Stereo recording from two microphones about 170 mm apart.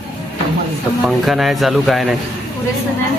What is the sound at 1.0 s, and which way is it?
Speech, centre (ahead or behind).